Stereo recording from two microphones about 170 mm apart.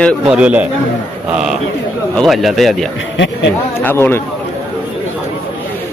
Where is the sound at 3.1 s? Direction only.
90° left.